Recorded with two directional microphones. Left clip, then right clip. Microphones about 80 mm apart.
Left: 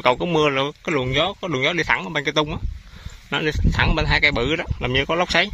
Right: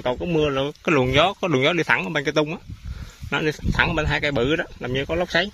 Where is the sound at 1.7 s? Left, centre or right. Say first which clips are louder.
Even; right.